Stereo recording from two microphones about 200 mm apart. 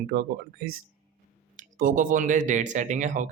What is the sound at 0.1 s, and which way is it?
Speech, 50° right (ahead or behind).